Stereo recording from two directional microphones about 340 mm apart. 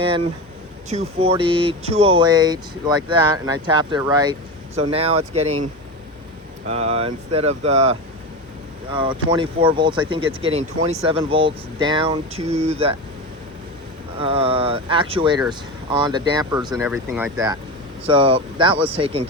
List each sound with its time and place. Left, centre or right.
0.9 s speech: centre
6.7 s speech: centre
14.2 s speech: centre